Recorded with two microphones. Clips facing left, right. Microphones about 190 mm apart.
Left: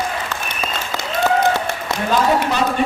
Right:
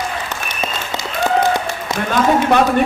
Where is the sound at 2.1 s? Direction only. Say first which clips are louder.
Right 3 dB; 55° right (ahead or behind).